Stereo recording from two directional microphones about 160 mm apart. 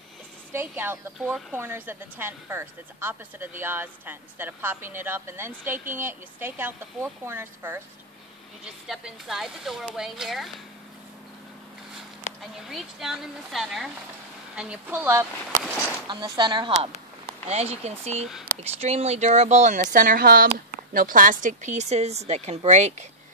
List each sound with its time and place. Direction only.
0.5 s a woman's voice: 15° right (ahead or behind)
8.8 s speech: centre (ahead or behind)
12.4 s a woman's voice: centre (ahead or behind)
16.1 s speech: 30° right (ahead or behind)
17.5 s speech: 40° right (ahead or behind)